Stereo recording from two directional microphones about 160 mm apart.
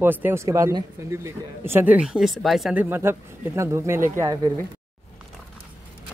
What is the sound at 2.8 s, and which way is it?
Speech, 15° right (ahead or behind).